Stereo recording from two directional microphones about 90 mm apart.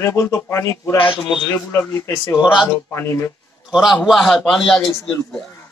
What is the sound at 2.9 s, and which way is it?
Speech, 30° left (ahead or behind).